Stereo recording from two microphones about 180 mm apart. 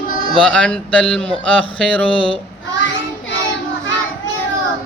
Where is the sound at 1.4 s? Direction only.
5° left (ahead or behind).